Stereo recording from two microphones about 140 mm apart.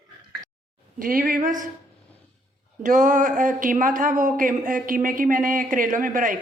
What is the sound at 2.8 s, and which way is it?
A woman's voice, 65° right (ahead or behind).